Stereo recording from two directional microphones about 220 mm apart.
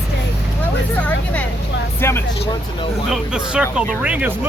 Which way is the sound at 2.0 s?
10° left (ahead or behind).